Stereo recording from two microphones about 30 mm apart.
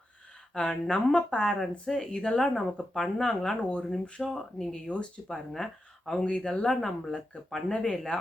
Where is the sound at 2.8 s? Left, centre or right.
Left.